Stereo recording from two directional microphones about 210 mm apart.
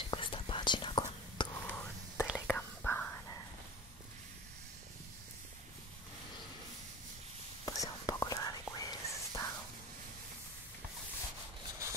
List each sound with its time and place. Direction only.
0.1 s whispering: 25° left (ahead or behind)
1.7 s whispering: 10° left (ahead or behind)
7.6 s whispering: 15° left (ahead or behind)